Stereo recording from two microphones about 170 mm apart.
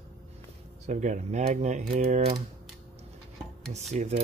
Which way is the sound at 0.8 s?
45° right (ahead or behind).